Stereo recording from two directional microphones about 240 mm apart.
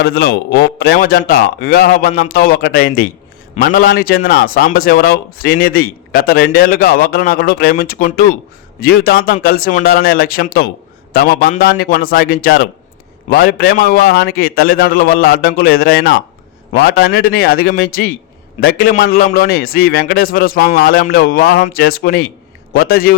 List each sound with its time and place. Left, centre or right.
0.0 s a man's voice: left